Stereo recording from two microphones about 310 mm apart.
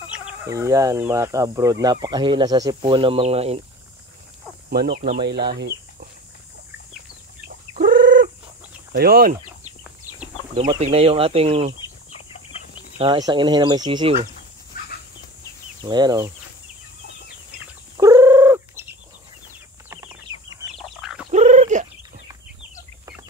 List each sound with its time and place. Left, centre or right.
0.3 s speech: centre
4.6 s speech: right
7.4 s chicken: right
8.9 s speech: right
10.5 s speech: centre
13.0 s speech: centre
14.7 s a sound: left
15.8 s speech: centre
17.9 s fowl: centre
19.9 s chicken: centre
21.0 s bird: centre
21.3 s frog: right